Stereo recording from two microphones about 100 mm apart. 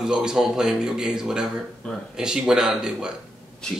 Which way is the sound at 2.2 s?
5° right (ahead or behind).